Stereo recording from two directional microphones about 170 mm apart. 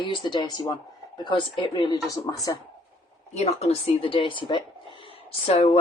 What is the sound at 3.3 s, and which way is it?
Speech, 40° left (ahead or behind).